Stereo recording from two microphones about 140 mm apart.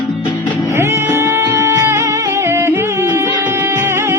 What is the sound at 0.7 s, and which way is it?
Music, 20° right (ahead or behind).